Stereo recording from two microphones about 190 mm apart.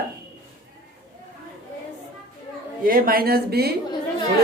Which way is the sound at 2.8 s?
50° right (ahead or behind).